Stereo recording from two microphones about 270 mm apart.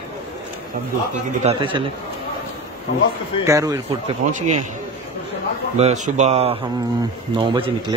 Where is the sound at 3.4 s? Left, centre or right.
Centre.